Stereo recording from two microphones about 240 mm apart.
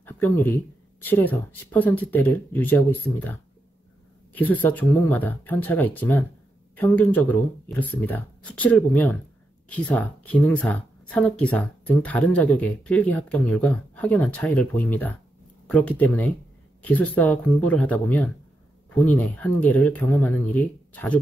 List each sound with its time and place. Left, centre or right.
0.0 s speech: centre